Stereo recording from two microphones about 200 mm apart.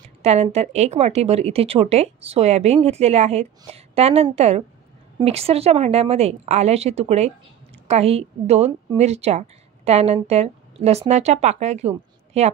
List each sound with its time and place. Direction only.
0.2 s a woman's voice: 30° right (ahead or behind)